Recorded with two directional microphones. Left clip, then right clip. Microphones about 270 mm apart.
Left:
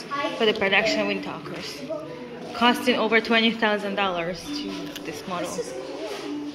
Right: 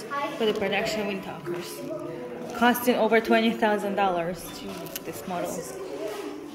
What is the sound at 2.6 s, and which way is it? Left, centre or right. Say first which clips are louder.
A woman's voice: left 1 dB; centre.